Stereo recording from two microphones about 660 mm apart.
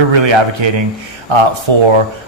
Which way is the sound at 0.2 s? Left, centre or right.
Right.